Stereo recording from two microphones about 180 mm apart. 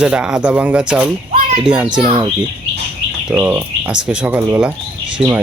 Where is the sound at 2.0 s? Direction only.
30° right (ahead or behind).